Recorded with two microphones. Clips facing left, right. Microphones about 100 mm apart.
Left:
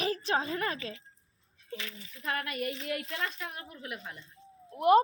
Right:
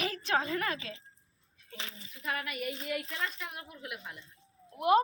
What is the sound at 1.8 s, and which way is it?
Speech, 30° right (ahead or behind).